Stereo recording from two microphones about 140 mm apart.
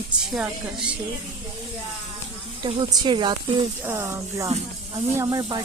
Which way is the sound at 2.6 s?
35° right (ahead or behind).